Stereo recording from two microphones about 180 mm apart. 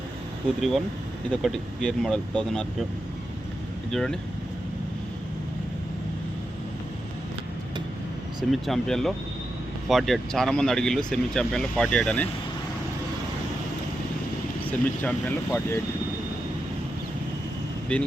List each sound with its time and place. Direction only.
1.3 s speech: 5° left (ahead or behind)
3.9 s speech: 5° left (ahead or behind)
8.4 s speech: centre (ahead or behind)
14.6 s speech: 10° left (ahead or behind)
17.9 s speech: 5° left (ahead or behind)